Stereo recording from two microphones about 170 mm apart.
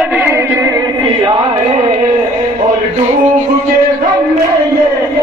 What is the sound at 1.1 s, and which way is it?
Chant, 25° right (ahead or behind).